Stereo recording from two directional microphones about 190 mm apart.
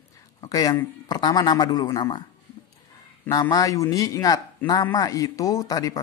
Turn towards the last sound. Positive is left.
turn(degrees=20)  # may be behind; listen again after turning